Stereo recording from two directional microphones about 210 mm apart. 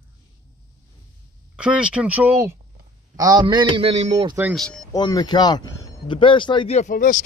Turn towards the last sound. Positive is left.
turn(degrees=40)  # may be behind; listen again after turning